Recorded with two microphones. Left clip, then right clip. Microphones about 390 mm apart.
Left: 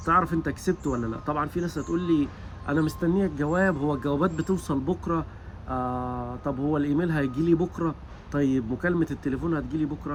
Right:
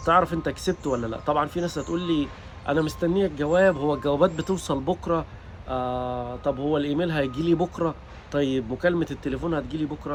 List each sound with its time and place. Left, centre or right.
0.0 s speech: centre